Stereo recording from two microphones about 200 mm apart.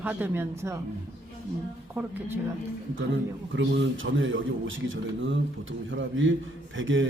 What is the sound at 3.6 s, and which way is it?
Speech, 70° right (ahead or behind).